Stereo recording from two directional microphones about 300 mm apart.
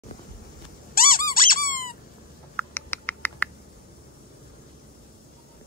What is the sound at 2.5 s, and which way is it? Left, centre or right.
Rodents, centre.